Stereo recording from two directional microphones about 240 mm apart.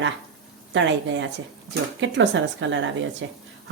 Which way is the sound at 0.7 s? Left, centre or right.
Right.